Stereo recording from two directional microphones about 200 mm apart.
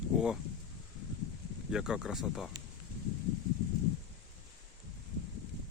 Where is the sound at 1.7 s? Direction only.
5° right (ahead or behind).